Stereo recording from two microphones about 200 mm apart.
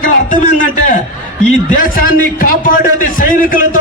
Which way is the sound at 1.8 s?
45° left (ahead or behind).